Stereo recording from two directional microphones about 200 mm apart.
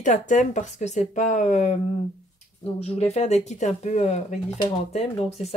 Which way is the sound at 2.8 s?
30° left (ahead or behind).